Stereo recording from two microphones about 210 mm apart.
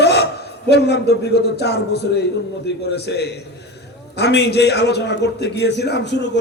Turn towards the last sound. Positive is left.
turn(degrees=55)  # may be behind; listen again after turning